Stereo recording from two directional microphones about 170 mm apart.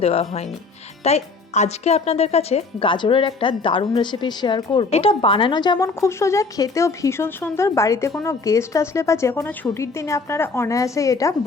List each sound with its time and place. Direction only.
0.0 s a woman's voice: 35° left (ahead or behind); by 11.3 s 20° left (ahead or behind)